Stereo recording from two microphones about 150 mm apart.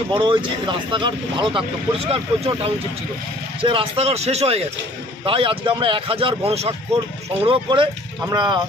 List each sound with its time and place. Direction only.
0.1 s speech: 35° right (ahead or behind)